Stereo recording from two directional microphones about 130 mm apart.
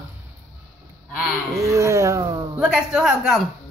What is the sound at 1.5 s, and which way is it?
Speech, 25° right (ahead or behind).